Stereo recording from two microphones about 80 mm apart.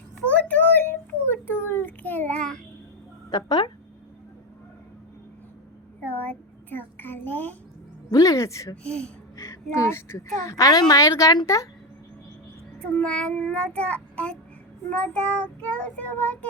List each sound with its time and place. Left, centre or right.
0.3 s a sound: centre
3.2 s speech: left
6.2 s a sound: left
8.1 s music: left
8.7 s child singing: centre
9.3 s speech: left
13.0 s child singing: centre